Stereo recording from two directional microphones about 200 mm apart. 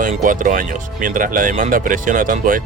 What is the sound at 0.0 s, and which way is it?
Speech, 40° right (ahead or behind).